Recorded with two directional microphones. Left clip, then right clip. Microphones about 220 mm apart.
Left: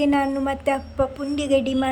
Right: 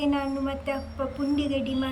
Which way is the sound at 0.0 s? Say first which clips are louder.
Left 6 dB; 15° left (ahead or behind).